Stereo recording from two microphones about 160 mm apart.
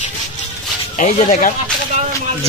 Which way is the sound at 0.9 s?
50° left (ahead or behind).